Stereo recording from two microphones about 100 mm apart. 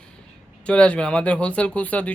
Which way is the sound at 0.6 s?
10° left (ahead or behind).